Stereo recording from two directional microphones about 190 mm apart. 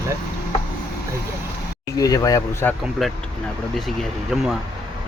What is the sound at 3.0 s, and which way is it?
Speech, centre (ahead or behind).